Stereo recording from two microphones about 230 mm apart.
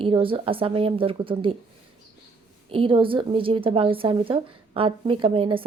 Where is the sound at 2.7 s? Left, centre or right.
Right.